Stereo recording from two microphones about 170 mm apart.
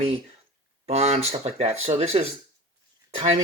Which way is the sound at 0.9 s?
40° right (ahead or behind).